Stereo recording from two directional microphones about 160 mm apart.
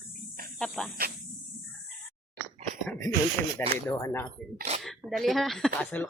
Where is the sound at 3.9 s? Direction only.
15° left (ahead or behind).